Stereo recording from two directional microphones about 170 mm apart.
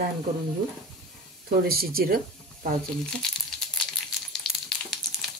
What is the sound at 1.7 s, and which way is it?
Speech, 60° right (ahead or behind).